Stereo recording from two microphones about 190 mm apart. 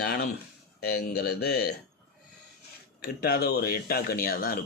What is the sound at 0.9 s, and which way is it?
Speech, 55° left (ahead or behind).